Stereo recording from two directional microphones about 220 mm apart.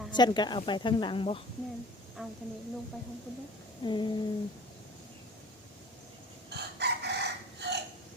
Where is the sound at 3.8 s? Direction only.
20° left (ahead or behind).